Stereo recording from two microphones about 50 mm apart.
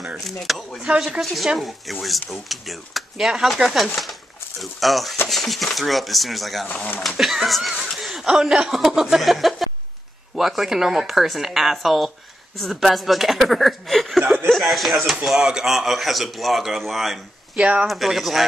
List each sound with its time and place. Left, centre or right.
0.2 s speech: centre
0.8 s speech: centre
1.2 s speech: centre
15.3 s speech: centre